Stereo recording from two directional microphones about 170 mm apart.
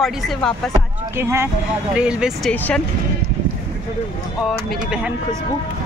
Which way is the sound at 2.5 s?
10° left (ahead or behind).